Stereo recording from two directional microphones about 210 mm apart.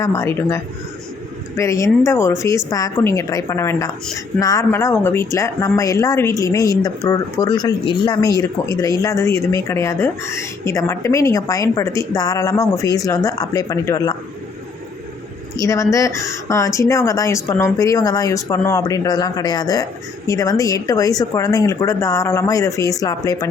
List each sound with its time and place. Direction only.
0.0 s speech: 15° left (ahead or behind)
15.5 s speech: 15° left (ahead or behind)